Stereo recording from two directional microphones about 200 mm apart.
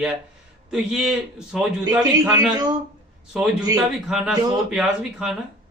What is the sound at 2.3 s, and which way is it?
Speech, 20° right (ahead or behind).